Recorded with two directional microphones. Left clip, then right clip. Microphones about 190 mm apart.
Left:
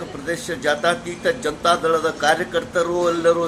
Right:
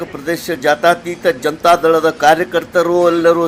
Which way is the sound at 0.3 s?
35° right (ahead or behind).